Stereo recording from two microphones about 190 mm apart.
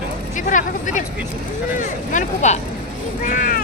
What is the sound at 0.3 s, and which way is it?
Speech, 40° left (ahead or behind).